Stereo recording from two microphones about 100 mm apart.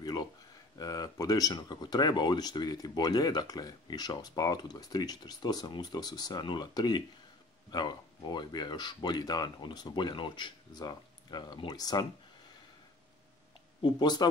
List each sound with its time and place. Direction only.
0.0 s a sound: 45° left (ahead or behind)
0.7 s speech: 40° left (ahead or behind)
13.8 s speech: 45° left (ahead or behind)